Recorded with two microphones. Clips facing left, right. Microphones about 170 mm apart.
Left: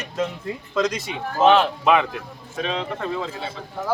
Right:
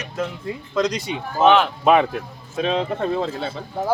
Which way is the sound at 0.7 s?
5° left (ahead or behind).